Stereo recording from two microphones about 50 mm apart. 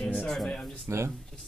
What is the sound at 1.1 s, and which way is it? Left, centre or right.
Speech, centre.